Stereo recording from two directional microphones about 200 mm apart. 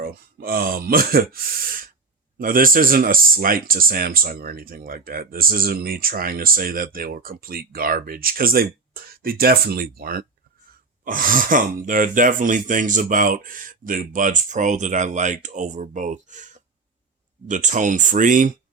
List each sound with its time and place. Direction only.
0.0 s speech: 50° right (ahead or behind)